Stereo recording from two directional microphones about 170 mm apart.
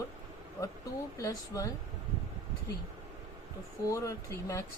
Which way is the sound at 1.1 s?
20° left (ahead or behind).